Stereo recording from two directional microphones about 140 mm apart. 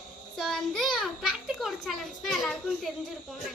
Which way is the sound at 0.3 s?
Centre (ahead or behind).